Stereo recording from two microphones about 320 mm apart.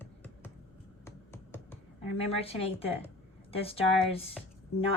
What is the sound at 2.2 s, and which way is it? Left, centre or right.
A woman's voice, centre.